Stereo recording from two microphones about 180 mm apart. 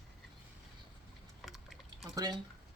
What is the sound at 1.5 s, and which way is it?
Pour, centre (ahead or behind).